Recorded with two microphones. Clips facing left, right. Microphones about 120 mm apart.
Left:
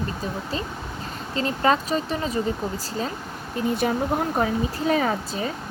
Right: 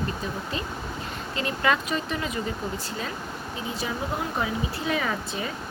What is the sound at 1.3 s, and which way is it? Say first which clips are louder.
Speech: left 4 dB; 35° left (ahead or behind).